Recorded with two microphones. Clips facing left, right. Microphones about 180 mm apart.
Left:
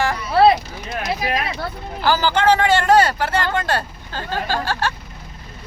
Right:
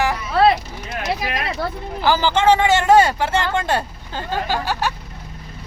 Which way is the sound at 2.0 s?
20° right (ahead or behind).